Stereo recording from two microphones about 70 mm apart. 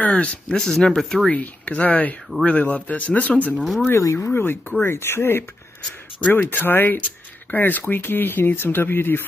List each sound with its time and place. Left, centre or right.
0.0 s speech: centre
0.6 s speech: centre
1.3 s speech: centre
3.5 s speech: centre
3.9 s speech: left
4.3 s speech: left